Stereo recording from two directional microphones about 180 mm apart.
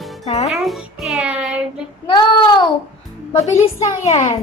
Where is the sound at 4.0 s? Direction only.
35° left (ahead or behind).